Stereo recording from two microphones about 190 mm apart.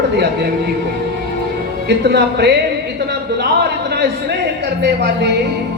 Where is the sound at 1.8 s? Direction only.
60° right (ahead or behind).